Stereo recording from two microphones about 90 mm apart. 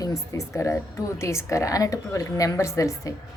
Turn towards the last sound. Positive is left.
turn(degrees=35)  # may be behind; listen again after turning